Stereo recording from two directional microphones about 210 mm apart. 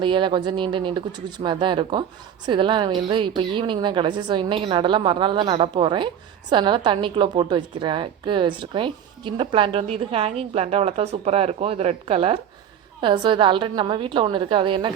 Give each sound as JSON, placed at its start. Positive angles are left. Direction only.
{"t": 0.0, "sound": "a woman's voice", "side_deg": -20}